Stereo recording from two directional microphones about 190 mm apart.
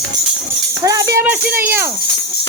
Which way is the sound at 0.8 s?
15° right (ahead or behind).